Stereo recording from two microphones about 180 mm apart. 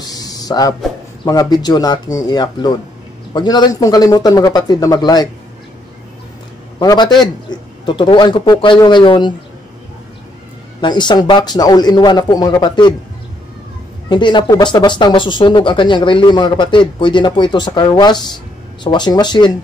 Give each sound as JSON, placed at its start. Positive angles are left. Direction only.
{"t": 0.0, "sound": "a sound", "side_deg": 20}
{"t": 1.2, "sound": "speech", "side_deg": 20}
{"t": 6.8, "sound": "a man's voice", "side_deg": 20}
{"t": 10.8, "sound": "speech", "side_deg": 25}
{"t": 14.0, "sound": "speech", "side_deg": 25}